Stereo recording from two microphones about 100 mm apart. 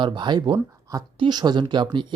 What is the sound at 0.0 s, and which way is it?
Speech, 50° right (ahead or behind).